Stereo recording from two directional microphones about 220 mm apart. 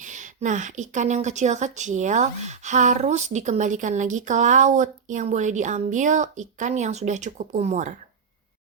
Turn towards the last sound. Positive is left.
turn(degrees=-30)  # may be behind; listen again after turning